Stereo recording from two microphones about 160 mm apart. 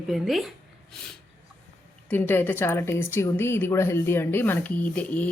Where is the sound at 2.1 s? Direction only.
15° left (ahead or behind).